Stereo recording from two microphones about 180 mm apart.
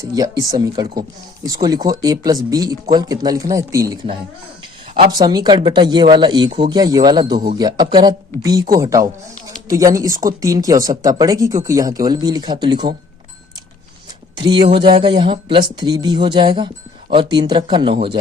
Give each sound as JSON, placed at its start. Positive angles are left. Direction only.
{"t": 0.0, "sound": "speech", "side_deg": -20}
{"t": 5.1, "sound": "speech", "side_deg": -20}
{"t": 14.4, "sound": "speech", "side_deg": -25}